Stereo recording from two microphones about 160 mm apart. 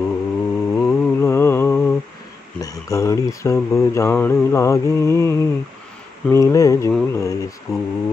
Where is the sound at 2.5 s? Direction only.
20° left (ahead or behind).